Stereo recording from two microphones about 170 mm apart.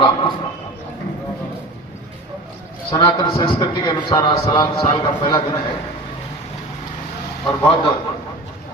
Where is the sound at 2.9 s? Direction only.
30° left (ahead or behind).